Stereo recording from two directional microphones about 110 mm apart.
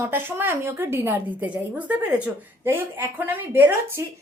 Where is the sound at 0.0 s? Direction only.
20° right (ahead or behind).